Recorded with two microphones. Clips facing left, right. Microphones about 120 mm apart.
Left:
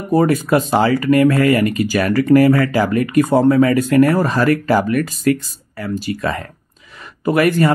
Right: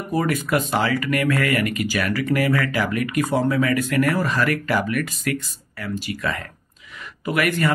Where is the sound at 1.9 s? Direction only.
40° left (ahead or behind).